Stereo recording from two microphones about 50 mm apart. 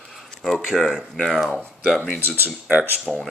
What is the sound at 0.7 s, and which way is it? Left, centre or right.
Speech, centre.